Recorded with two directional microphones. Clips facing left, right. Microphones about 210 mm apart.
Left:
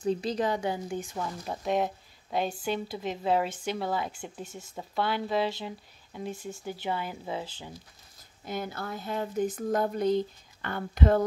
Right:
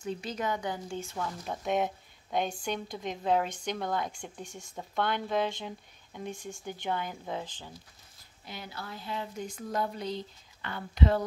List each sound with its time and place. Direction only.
0.0 s speech: 35° left (ahead or behind)
0.9 s speech: 15° left (ahead or behind)
1.4 s speech: centre (ahead or behind)
8.5 s speech: 50° left (ahead or behind)